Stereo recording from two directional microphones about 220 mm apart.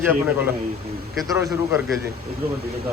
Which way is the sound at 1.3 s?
10° right (ahead or behind).